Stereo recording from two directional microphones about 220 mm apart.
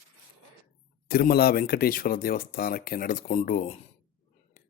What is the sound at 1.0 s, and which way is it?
Speech, 40° left (ahead or behind).